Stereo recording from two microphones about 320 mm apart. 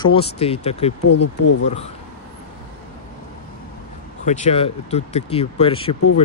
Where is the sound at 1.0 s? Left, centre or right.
Left.